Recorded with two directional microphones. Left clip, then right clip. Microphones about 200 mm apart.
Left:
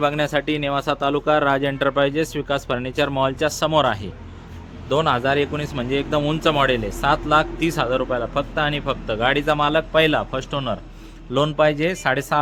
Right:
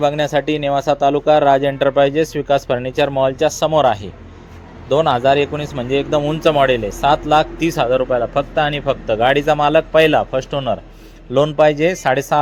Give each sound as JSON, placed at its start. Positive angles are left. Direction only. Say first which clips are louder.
{"t": 0.0, "sound": "a man's voice", "louder": "right 4 dB", "side_deg": 0}